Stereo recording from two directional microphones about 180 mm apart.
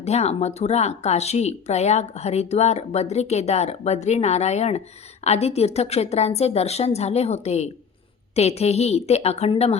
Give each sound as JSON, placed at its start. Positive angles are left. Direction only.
{"t": 0.0, "sound": "speech", "side_deg": 35}